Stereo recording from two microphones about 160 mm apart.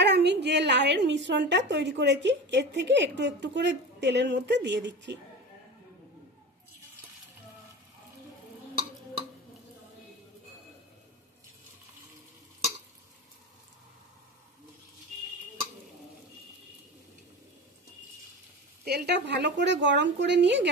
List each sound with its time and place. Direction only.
0.0 s a woman's voice: 90° right
18.9 s a woman's voice: 90° right